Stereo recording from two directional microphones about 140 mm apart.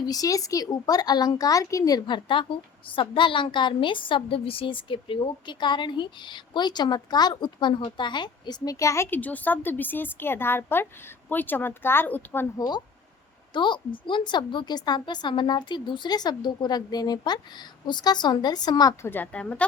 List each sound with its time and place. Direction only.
0.0 s speech: 25° left (ahead or behind)
12.5 s speech: 30° left (ahead or behind)
19.1 s speech: 10° left (ahead or behind)